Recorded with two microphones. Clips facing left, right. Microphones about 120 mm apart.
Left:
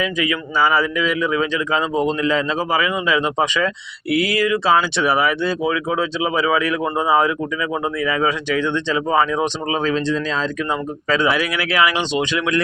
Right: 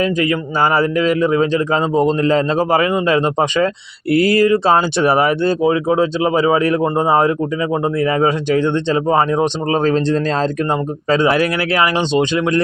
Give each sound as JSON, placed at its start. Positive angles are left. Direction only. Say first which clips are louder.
{"t": 0.0, "sound": "speech", "louder": "right 5 dB", "side_deg": -40}
{"t": 5.5, "sound": "speech", "louder": "right 6 dB", "side_deg": -35}